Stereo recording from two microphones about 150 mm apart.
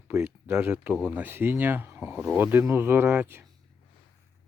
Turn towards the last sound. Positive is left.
turn(degrees=-15)  # may be behind; listen again after turning